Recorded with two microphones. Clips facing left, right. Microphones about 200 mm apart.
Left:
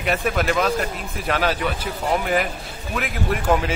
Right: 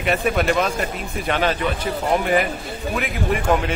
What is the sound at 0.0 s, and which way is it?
A man's voice, centre (ahead or behind).